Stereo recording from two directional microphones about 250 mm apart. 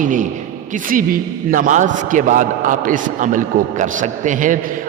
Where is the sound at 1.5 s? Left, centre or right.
Right.